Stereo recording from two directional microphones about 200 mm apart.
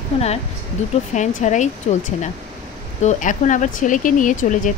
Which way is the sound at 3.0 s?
40° left (ahead or behind).